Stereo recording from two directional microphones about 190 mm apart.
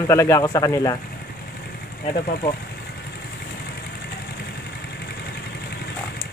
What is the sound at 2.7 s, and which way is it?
Vehicle, 55° left (ahead or behind).